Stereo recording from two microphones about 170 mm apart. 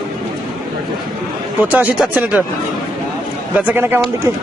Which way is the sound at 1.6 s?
10° right (ahead or behind).